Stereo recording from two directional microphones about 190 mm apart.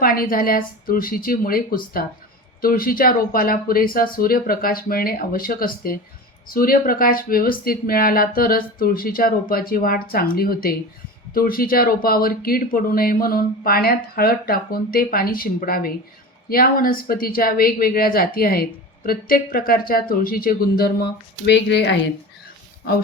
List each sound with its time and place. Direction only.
0.0 s speech: 50° left (ahead or behind); by 21.9 s 65° left (ahead or behind)